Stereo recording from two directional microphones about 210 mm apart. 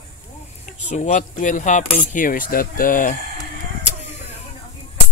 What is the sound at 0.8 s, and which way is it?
Speech, 35° left (ahead or behind).